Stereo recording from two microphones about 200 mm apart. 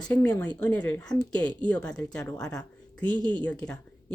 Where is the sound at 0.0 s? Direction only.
5° left (ahead or behind).